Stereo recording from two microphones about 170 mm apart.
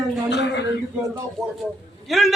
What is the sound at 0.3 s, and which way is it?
Speech, 90° left.